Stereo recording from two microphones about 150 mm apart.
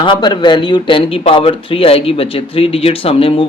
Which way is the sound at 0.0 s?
30° left (ahead or behind).